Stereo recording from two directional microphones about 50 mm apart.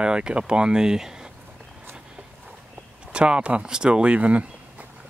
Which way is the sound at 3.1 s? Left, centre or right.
Right.